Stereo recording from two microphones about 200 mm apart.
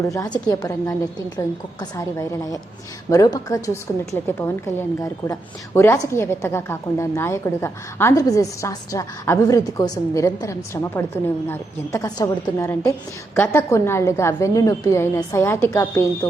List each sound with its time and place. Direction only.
0.4 s a woman's voice: 20° left (ahead or behind)